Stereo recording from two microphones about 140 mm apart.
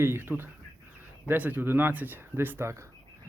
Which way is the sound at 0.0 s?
15° right (ahead or behind).